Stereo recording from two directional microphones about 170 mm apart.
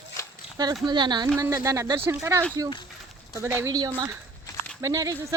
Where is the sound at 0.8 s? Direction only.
25° right (ahead or behind).